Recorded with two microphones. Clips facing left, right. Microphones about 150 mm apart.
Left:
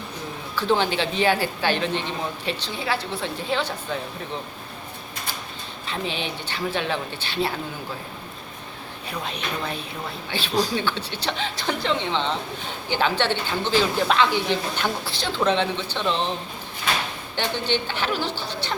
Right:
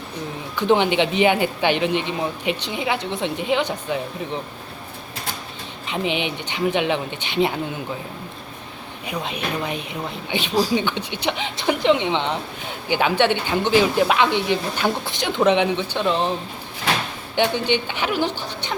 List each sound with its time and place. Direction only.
0.5 s speech: 15° right (ahead or behind)
5.8 s speech: 15° right (ahead or behind)
9.0 s speech: 15° right (ahead or behind)
17.3 s speech: 15° right (ahead or behind)